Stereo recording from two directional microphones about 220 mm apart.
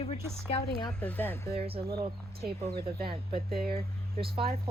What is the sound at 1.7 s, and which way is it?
Speech, 20° right (ahead or behind).